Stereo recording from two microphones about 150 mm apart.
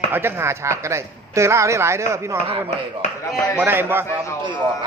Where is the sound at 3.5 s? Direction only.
15° right (ahead or behind).